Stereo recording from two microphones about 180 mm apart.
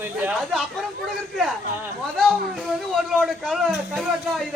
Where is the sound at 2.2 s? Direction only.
Centre (ahead or behind).